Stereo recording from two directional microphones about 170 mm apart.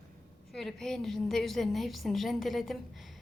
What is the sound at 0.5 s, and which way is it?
A woman's voice, 5° left (ahead or behind).